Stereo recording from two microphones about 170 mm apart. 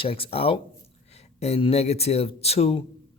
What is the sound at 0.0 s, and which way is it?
Speech, 35° left (ahead or behind).